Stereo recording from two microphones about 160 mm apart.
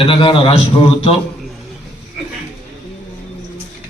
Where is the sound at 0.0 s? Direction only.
35° left (ahead or behind).